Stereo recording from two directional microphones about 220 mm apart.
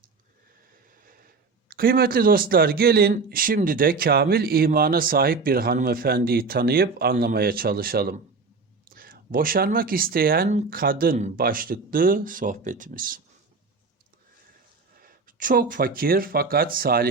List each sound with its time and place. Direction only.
1.6 s speech: 45° right (ahead or behind)
15.0 s speech: 40° right (ahead or behind)